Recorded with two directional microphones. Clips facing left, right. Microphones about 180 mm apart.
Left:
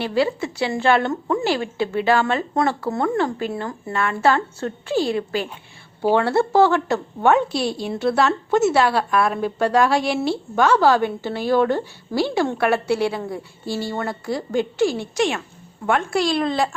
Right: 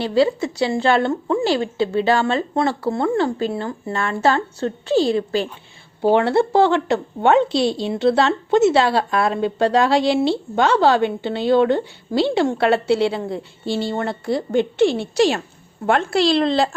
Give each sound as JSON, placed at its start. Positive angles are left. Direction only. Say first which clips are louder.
{"t": 0.0, "sound": "a woman's voice", "louder": "right 3 dB", "side_deg": -35}